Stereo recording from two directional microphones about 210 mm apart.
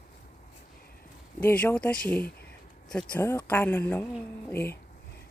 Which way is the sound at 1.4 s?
10° left (ahead or behind).